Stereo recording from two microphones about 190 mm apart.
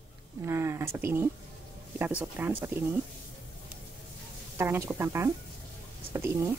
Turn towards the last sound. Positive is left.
turn(degrees=-15)  # may be behind; listen again after turning